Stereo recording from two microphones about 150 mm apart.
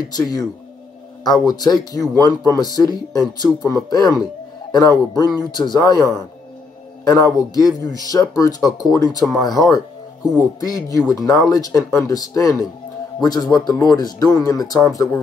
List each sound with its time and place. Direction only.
0.1 s speech: 25° left (ahead or behind)
7.3 s speech: 25° left (ahead or behind)